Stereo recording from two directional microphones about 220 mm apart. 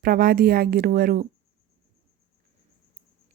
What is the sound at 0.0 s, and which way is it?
Speech, 45° right (ahead or behind).